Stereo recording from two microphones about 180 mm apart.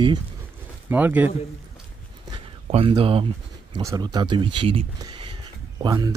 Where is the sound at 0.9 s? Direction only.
10° right (ahead or behind).